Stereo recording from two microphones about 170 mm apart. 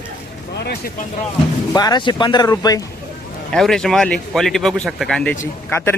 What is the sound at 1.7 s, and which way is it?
Speech, 25° left (ahead or behind).